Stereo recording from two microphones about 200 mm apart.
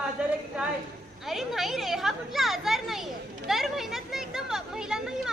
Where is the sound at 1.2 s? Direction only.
Centre (ahead or behind).